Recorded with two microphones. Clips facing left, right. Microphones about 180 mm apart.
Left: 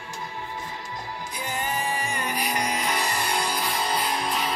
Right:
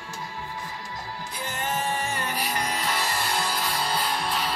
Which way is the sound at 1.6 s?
10° left (ahead or behind).